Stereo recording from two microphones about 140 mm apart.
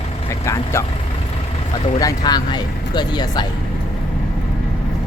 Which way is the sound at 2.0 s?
25° left (ahead or behind).